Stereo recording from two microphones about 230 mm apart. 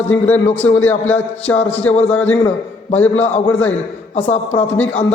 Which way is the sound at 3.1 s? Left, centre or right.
Left.